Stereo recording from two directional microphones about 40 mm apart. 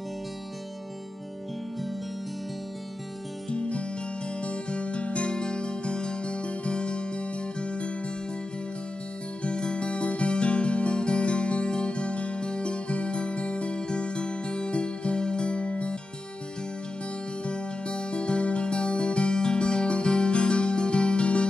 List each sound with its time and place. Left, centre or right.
3.4 s music: left
9.4 s music: left
17.5 s music: left